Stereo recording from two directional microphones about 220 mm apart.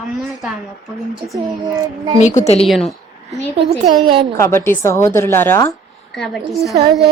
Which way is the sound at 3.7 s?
20° right (ahead or behind).